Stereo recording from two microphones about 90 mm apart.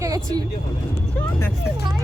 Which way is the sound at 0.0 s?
40° right (ahead or behind).